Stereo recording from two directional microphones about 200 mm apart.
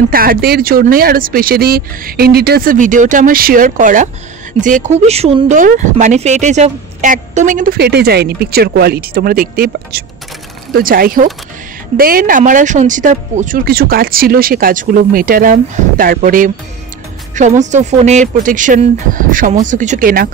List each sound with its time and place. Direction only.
0.1 s speech: 45° right (ahead or behind)